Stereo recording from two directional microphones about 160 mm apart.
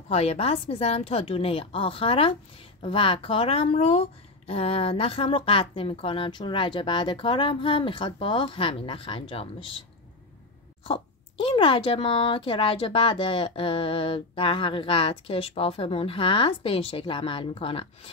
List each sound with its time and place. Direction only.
0.1 s speech: 40° left (ahead or behind)
11.4 s speech: 35° left (ahead or behind)